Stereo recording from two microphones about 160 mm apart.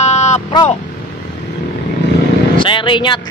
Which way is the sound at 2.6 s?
30° left (ahead or behind).